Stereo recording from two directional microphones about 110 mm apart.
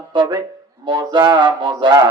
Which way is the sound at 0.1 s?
45° right (ahead or behind).